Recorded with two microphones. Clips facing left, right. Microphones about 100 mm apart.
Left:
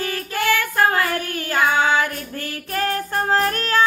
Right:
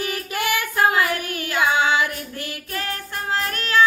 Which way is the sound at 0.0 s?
15° right (ahead or behind).